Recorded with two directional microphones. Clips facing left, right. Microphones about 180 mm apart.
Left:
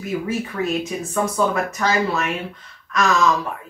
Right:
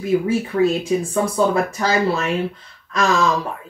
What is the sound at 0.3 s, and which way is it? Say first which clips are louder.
Speech: right 5 dB; 30° right (ahead or behind).